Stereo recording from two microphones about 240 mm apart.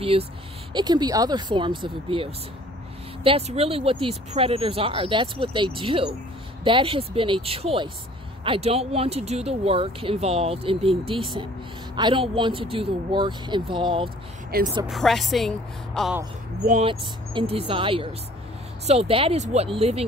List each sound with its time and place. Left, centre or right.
0.0 s speech: right
3.3 s speech: right
14.5 s speech: right
14.9 s a woman's voice: centre
16.6 s speech: right